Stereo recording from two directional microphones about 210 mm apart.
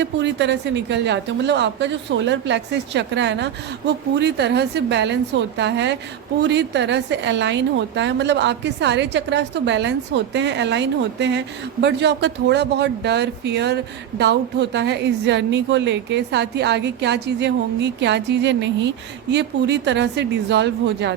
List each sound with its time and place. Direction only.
0.0 s a woman's voice: 55° right (ahead or behind)